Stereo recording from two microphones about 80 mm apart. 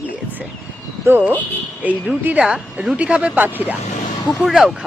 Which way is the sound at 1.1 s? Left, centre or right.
Right.